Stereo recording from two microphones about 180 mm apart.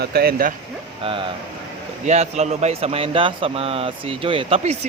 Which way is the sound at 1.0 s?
30° right (ahead or behind).